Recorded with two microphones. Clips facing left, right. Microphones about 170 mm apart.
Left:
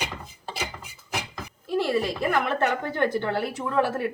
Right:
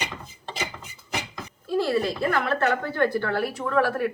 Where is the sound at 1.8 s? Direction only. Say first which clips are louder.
Right 1 dB; 15° left (ahead or behind).